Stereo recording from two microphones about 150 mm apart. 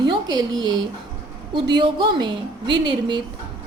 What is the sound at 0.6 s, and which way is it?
A woman's voice, 30° right (ahead or behind).